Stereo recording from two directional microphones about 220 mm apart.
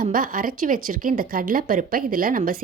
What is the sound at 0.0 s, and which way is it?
Speech, 40° right (ahead or behind).